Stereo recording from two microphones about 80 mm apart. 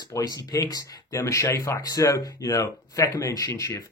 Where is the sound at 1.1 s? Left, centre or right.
Left.